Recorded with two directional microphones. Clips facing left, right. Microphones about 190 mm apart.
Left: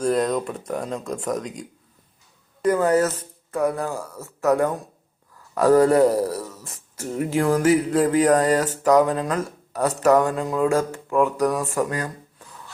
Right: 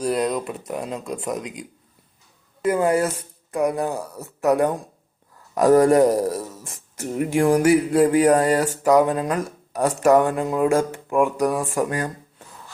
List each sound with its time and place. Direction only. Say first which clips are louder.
0.0 s speech: left 1 dB; 5° right (ahead or behind)